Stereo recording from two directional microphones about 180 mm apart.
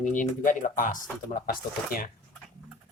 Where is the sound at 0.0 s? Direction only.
45° left (ahead or behind).